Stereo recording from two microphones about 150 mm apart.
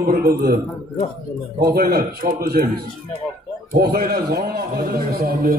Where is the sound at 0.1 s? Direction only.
90° right.